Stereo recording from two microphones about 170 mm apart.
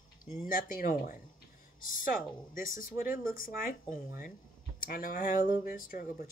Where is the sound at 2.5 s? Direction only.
55° left (ahead or behind).